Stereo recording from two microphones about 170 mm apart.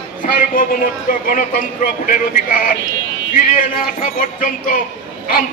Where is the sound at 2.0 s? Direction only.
55° left (ahead or behind).